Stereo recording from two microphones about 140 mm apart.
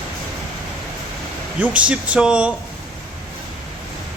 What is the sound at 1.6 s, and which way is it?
Speech, 10° right (ahead or behind).